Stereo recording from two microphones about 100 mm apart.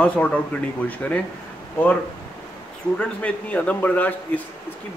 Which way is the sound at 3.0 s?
15° left (ahead or behind).